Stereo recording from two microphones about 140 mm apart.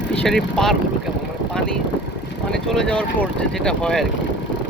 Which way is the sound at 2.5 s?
5° left (ahead or behind).